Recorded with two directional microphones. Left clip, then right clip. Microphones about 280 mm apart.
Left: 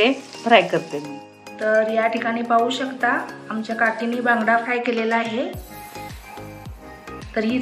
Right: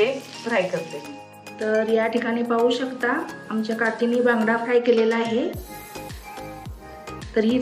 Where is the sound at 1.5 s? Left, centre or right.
Centre.